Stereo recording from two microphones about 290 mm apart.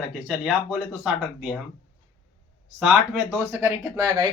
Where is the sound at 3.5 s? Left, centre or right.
Centre.